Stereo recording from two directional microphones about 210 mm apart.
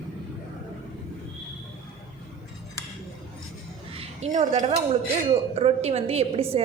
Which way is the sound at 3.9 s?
35° right (ahead or behind).